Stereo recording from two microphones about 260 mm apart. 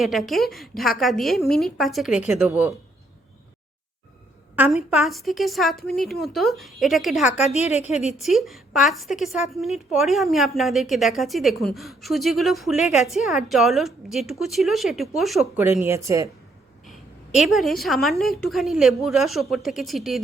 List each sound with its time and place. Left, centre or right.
0.0 s a woman's voice: centre
4.5 s a woman's voice: centre
7.3 s a woman's voice: left
8.2 s a woman's voice: centre
16.8 s a woman's voice: centre